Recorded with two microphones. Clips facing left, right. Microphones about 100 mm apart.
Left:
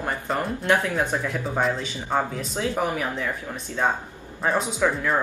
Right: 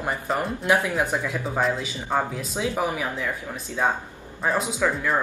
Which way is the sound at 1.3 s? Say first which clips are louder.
Even; centre (ahead or behind).